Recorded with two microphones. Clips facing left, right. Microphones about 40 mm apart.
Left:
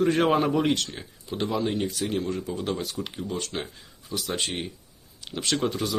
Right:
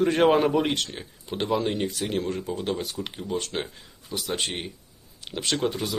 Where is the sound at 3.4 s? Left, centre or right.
Right.